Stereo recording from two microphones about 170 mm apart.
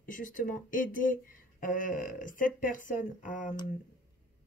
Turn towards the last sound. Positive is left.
turn(degrees=50)  # may be behind; listen again after turning